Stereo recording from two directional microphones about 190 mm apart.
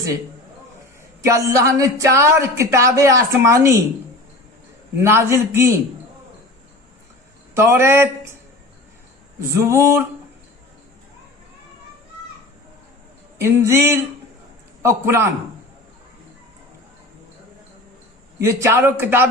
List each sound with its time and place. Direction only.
1.2 s speech: 15° right (ahead or behind)
4.9 s speech: 15° right (ahead or behind)
7.5 s speech: 15° right (ahead or behind)
9.6 s speech: 15° right (ahead or behind)
13.4 s speech: 15° right (ahead or behind)
18.3 s speech: 15° right (ahead or behind)